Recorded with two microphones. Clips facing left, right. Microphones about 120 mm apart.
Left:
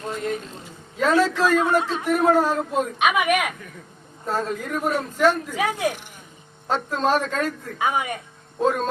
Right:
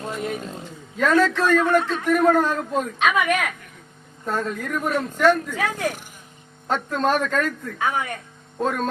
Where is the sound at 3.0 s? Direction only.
15° left (ahead or behind).